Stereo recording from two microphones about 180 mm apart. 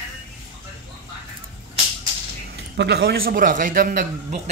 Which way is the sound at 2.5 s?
70° right (ahead or behind).